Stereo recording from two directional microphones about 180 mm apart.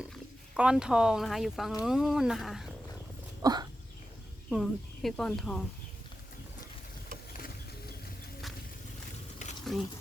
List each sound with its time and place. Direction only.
0.5 s speech: 5° right (ahead or behind)
3.4 s dog: 20° right (ahead or behind)
4.4 s speech: centre (ahead or behind)
9.7 s speech: centre (ahead or behind)